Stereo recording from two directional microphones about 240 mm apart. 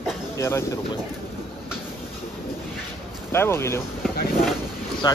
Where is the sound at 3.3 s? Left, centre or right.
Centre.